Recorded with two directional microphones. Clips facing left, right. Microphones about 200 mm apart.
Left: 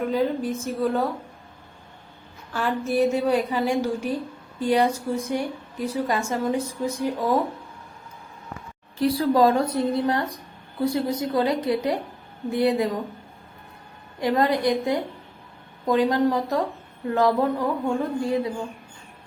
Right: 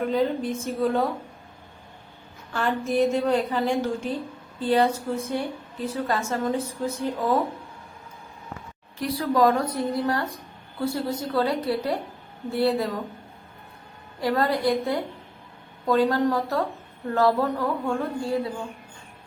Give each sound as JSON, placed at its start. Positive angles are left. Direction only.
{"t": 0.0, "sound": "a woman's voice", "side_deg": 10}
{"t": 2.5, "sound": "a woman's voice", "side_deg": 5}
{"t": 9.0, "sound": "a woman's voice", "side_deg": 30}
{"t": 14.2, "sound": "a woman's voice", "side_deg": 20}